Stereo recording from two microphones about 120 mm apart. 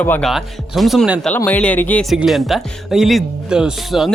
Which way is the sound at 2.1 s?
Centre (ahead or behind).